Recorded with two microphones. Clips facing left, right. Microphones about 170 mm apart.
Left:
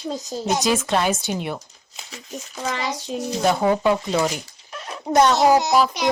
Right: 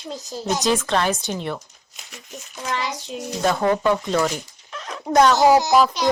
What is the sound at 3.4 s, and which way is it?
Speech, 15° left (ahead or behind).